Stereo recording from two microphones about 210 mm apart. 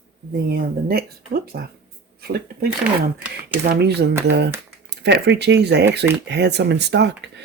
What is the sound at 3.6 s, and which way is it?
Speech, 50° right (ahead or behind).